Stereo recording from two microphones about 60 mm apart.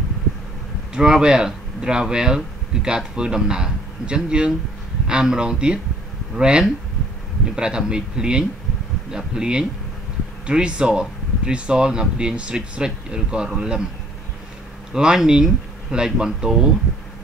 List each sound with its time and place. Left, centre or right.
0.9 s a man's voice: centre
14.9 s speech: centre